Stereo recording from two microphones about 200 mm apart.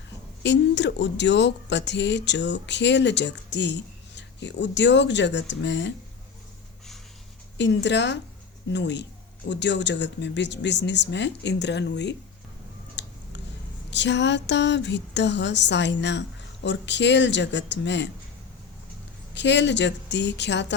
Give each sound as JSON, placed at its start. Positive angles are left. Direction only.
{"t": 0.4, "sound": "speech", "side_deg": 60}
{"t": 7.6, "sound": "speech", "side_deg": 60}
{"t": 13.0, "sound": "a sound", "side_deg": 60}
{"t": 13.9, "sound": "speech", "side_deg": 60}
{"t": 19.3, "sound": "speech", "side_deg": 60}